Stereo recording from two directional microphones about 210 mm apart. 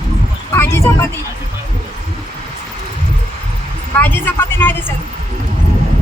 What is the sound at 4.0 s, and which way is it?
Speech, 10° left (ahead or behind).